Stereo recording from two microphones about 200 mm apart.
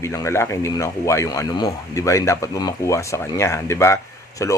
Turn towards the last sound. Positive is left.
turn(degrees=15)  # may be behind; listen again after turning